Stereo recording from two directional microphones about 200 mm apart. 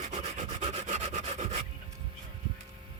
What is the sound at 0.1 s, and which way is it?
Rub, 35° right (ahead or behind).